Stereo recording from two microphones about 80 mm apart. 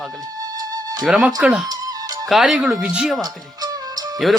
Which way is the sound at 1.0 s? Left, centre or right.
Centre.